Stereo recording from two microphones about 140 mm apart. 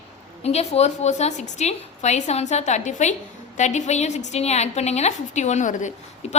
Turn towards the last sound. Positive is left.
turn(degrees=60)  # may be behind; listen again after turning